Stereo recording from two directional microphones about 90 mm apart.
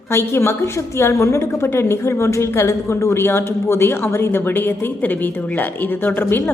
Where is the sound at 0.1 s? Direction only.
30° left (ahead or behind).